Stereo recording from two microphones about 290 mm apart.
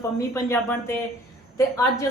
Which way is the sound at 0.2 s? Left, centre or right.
Centre.